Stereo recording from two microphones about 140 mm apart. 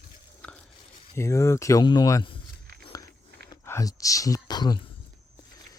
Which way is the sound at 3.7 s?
20° left (ahead or behind).